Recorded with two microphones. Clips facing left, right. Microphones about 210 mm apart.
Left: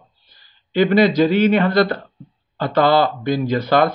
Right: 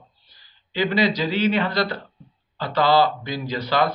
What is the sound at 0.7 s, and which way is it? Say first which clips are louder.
Speech: left 7 dB; 55° left (ahead or behind).